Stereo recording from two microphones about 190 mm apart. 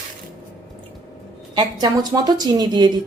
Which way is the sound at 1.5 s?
20° right (ahead or behind).